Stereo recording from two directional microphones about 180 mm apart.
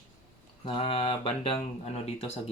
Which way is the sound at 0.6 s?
30° left (ahead or behind).